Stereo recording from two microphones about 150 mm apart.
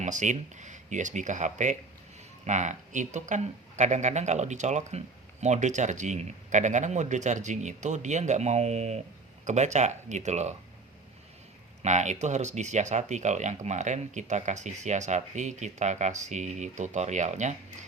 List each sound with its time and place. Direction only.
0.0 s speech: 55° right (ahead or behind)
11.8 s speech: 50° right (ahead or behind)